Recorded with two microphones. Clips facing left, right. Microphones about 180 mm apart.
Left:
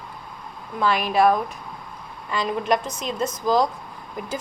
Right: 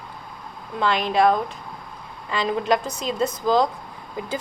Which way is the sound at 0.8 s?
20° right (ahead or behind).